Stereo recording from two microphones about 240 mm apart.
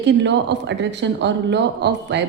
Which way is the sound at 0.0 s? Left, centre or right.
Right.